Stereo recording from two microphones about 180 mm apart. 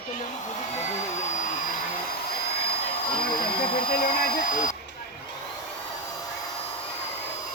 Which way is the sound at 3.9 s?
55° left (ahead or behind).